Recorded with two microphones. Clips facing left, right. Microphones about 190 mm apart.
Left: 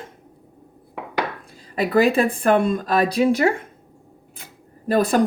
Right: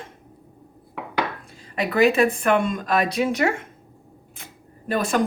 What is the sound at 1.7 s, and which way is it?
Speech, 35° left (ahead or behind).